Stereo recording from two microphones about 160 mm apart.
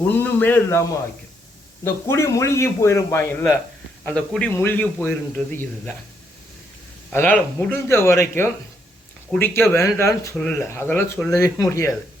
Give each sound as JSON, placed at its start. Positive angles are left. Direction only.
{"t": 0.1, "sound": "a man's voice", "side_deg": 10}
{"t": 7.1, "sound": "a man's voice", "side_deg": 10}
{"t": 10.3, "sound": "a man's voice", "side_deg": 5}